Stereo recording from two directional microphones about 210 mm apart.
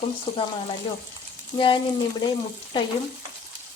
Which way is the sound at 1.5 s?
25° left (ahead or behind).